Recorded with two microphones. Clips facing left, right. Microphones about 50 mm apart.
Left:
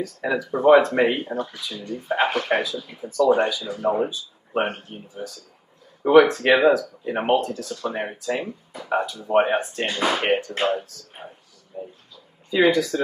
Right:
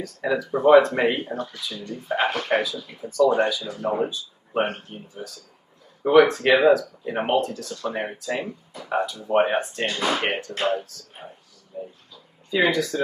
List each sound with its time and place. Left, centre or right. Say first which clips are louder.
0.0 s speech: even; centre
1.2 s speech: left 2 dB; centre
6.4 s speech: even; left
7.1 s speech: left 2 dB; centre
8.8 s a sound: left 1 dB; centre
9.3 s speech: left 1 dB; centre
10.6 s speech: left 1 dB; centre
11.7 s speech: even; centre